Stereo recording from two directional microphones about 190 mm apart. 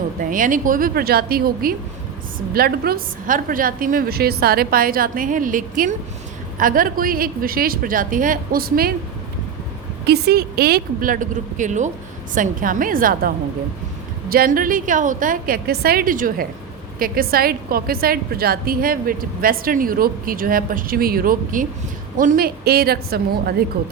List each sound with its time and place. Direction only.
0.2 s a woman's voice: 45° right (ahead or behind)
10.1 s a woman's voice: 55° right (ahead or behind)